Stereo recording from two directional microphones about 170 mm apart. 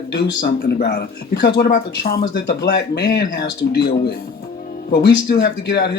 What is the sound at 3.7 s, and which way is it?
Speech, 75° left (ahead or behind).